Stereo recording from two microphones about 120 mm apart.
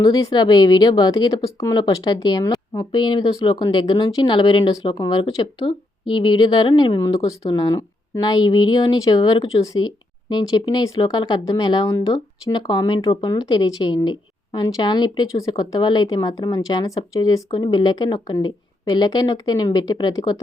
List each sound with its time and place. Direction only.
0.0 s speech: 35° left (ahead or behind)